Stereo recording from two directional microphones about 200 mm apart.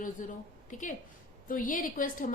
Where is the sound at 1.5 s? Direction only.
40° left (ahead or behind).